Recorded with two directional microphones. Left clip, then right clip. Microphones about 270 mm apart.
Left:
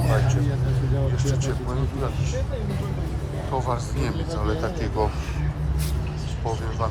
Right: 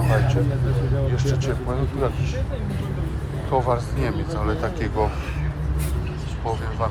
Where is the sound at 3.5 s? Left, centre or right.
Centre.